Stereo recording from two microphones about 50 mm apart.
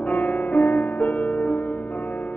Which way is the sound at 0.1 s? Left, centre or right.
Left.